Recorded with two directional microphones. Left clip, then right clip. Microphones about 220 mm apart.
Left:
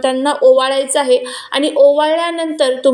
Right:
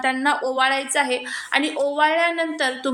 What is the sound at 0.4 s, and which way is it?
Speech, 20° right (ahead or behind).